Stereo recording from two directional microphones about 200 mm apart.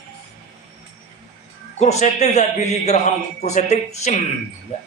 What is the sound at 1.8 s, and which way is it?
Speech, 35° left (ahead or behind).